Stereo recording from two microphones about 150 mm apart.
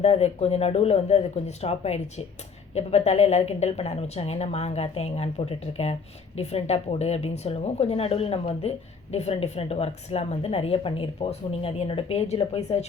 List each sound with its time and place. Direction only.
0.0 s a woman's voice: 45° left (ahead or behind)